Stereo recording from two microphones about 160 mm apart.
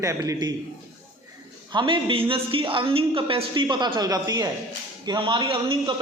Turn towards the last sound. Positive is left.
turn(degrees=-30)  # may be behind; listen again after turning